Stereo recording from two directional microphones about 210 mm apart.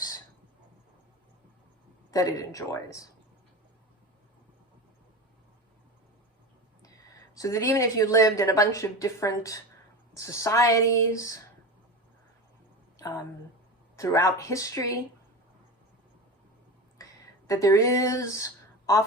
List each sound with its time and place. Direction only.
2.0 s a woman's voice: 15° left (ahead or behind)
7.3 s a woman's voice: 15° left (ahead or behind)
13.0 s a woman's voice: 15° left (ahead or behind)
17.0 s a sound: 15° left (ahead or behind)